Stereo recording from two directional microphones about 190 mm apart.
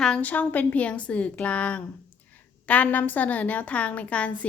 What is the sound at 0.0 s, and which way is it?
A woman's voice, 5° left (ahead or behind).